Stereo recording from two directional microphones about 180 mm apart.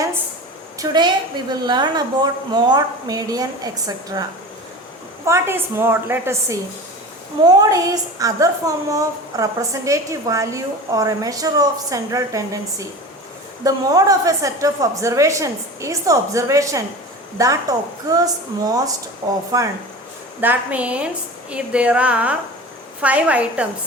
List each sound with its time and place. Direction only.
0.8 s a woman's voice: 25° right (ahead or behind)
13.7 s a woman's voice: 20° right (ahead or behind)
20.4 s a woman's voice: 10° right (ahead or behind)